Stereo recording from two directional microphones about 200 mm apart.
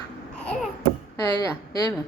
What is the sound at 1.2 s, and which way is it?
Speech, 20° left (ahead or behind).